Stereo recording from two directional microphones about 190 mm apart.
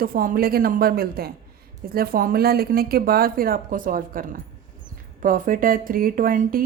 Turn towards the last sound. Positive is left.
turn(degrees=-45)  # may be behind; listen again after turning